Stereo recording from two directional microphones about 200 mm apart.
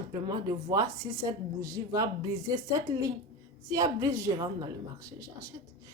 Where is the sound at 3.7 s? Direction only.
15° right (ahead or behind).